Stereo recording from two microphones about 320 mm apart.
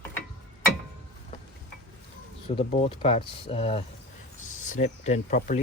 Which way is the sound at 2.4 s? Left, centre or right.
Centre.